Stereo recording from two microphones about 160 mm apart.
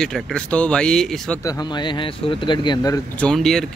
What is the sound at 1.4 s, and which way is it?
Speech, 25° left (ahead or behind).